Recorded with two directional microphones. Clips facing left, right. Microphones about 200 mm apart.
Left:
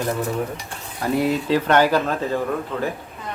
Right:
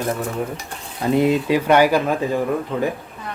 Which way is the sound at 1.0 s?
20° right (ahead or behind).